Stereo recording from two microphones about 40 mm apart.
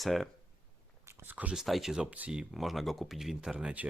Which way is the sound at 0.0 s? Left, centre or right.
Centre.